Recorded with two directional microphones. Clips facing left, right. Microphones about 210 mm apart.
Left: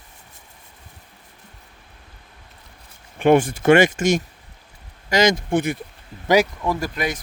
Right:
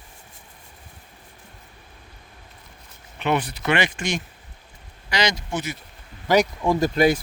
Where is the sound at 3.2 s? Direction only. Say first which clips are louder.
Left 8 dB; 50° left (ahead or behind).